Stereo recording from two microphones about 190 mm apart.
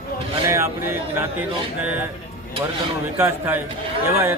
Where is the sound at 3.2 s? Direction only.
10° right (ahead or behind).